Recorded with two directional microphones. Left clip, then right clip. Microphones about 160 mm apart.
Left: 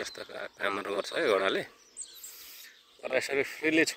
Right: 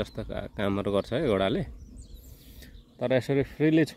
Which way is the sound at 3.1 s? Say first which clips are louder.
Right 2 dB; 30° right (ahead or behind).